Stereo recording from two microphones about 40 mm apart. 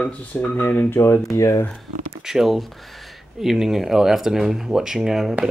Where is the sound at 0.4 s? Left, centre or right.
Left.